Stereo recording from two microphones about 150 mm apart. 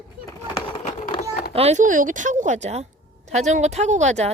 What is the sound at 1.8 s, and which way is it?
A woman's voice, 60° right (ahead or behind).